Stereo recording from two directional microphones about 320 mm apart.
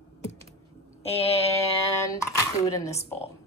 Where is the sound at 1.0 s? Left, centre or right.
Centre.